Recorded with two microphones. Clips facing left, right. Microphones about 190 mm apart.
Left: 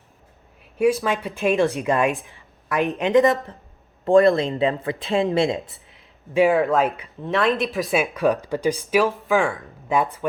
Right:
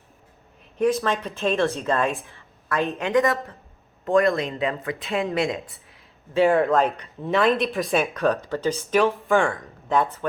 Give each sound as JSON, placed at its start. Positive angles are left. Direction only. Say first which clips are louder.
{"t": 0.8, "sound": "speech", "louder": "left 2 dB", "side_deg": 10}
{"t": 4.0, "sound": "speech", "louder": "left 5 dB", "side_deg": 30}
{"t": 5.5, "sound": "a sound", "louder": "left 3 dB", "side_deg": 15}
{"t": 6.5, "sound": "speech", "louder": "even", "side_deg": 5}
{"t": 9.0, "sound": "speech", "louder": "right 1 dB", "side_deg": 0}